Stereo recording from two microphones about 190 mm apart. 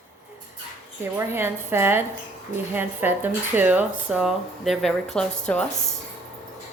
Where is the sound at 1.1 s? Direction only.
10° right (ahead or behind); by 5.3 s 5° left (ahead or behind).